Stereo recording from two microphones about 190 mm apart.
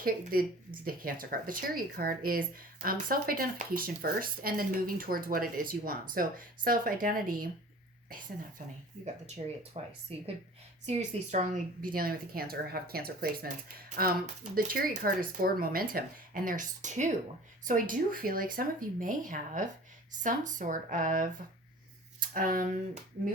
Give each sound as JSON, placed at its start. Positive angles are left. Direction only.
{"t": 0.0, "sound": "speech", "side_deg": -50}
{"t": 9.0, "sound": "speech", "side_deg": -35}